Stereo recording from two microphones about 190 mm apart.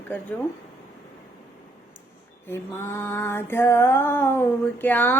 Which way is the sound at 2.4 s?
10° left (ahead or behind).